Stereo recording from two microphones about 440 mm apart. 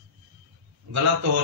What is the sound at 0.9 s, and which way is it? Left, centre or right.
Mantra, right.